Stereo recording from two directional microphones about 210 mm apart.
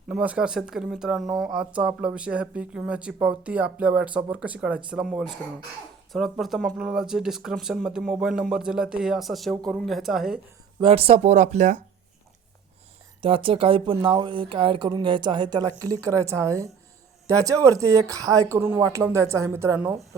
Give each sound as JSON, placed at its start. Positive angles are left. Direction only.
{"t": 0.1, "sound": "speech", "side_deg": -5}
{"t": 10.8, "sound": "speech", "side_deg": -25}
{"t": 13.2, "sound": "speech", "side_deg": -25}